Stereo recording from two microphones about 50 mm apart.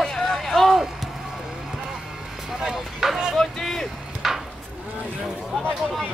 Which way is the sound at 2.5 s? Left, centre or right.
Centre.